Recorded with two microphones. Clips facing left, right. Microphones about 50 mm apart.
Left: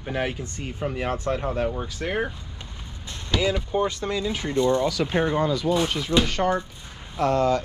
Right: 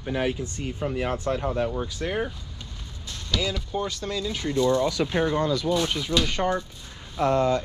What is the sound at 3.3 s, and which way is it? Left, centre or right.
Speech, left.